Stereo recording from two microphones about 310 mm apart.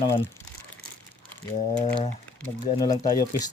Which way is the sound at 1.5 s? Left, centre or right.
Left.